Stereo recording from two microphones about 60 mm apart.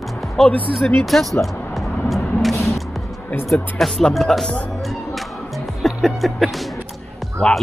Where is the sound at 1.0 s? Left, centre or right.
Centre.